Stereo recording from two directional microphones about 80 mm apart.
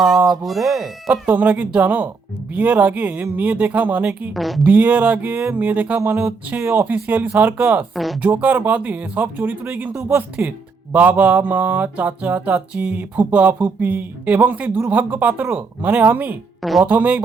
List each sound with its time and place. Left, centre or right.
0.3 s speech: centre
1.3 s speech: right
4.4 s speech: centre
4.6 s speech: right
7.9 s speech: centre
8.2 s speech: centre
16.6 s speech: centre
16.8 s speech: centre